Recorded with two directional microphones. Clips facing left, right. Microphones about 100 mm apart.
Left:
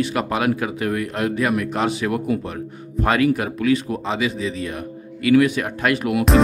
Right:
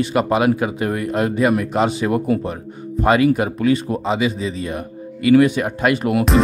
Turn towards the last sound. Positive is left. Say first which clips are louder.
# right 3 dB
turn(degrees=-40)  # may be behind; listen again after turning